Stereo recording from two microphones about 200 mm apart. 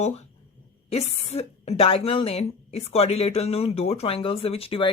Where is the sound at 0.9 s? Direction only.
30° left (ahead or behind).